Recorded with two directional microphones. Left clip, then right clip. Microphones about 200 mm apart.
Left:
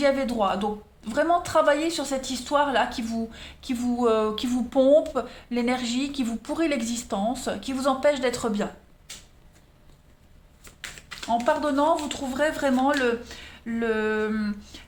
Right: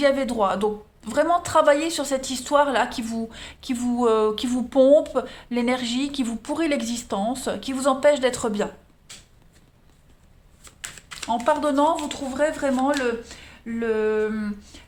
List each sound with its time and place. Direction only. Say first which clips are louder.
0.0 s speech: right 2 dB; 30° right (ahead or behind)
11.3 s speech: right 2 dB; 25° right (ahead or behind); by 14.8 s 10° right (ahead or behind)